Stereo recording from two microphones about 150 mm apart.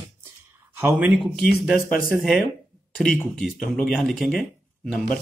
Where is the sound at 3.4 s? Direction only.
Centre (ahead or behind).